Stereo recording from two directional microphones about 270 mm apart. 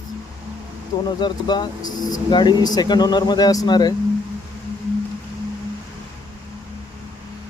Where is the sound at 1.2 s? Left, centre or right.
Centre.